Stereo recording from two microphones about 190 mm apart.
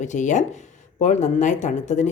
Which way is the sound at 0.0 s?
40° left (ahead or behind).